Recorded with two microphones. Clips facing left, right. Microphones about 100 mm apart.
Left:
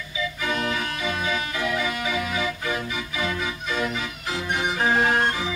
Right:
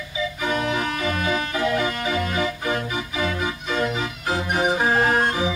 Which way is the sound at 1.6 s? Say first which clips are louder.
Right 5 dB; 40° right (ahead or behind).